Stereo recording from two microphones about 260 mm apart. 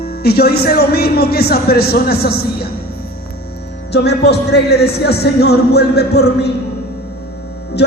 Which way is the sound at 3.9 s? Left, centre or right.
Left.